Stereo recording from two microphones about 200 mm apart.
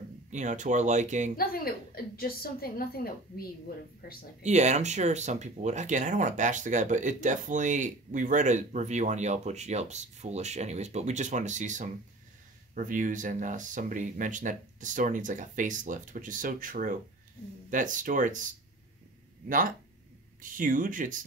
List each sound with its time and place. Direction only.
0.3 s speech: 35° right (ahead or behind)
1.3 s a woman's voice: 50° left (ahead or behind)
4.4 s speech: 35° right (ahead or behind)
20.4 s speech: 40° right (ahead or behind)